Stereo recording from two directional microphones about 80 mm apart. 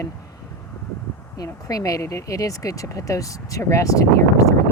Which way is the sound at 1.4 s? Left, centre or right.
Left.